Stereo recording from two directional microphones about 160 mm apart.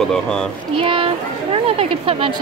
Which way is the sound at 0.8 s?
35° right (ahead or behind).